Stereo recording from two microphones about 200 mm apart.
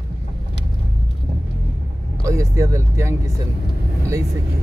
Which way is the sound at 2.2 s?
15° right (ahead or behind).